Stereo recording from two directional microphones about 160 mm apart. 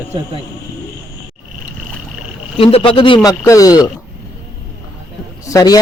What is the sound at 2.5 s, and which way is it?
A man's voice, 35° left (ahead or behind).